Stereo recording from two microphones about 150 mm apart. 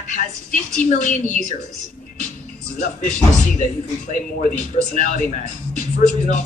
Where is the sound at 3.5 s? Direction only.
60° left (ahead or behind).